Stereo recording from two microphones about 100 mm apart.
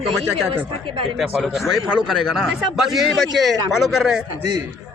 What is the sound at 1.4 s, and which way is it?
A man's voice, centre (ahead or behind).